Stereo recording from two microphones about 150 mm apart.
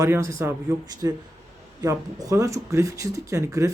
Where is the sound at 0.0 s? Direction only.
20° right (ahead or behind).